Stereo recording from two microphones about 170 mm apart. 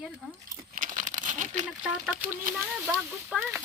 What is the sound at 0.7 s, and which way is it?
Crumpling, 55° right (ahead or behind).